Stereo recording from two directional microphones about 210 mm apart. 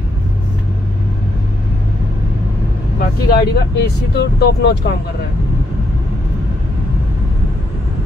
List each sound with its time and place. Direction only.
3.0 s speech: 50° left (ahead or behind)